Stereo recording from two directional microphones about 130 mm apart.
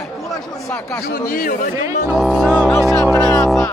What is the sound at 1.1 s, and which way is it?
Speech, 90° left.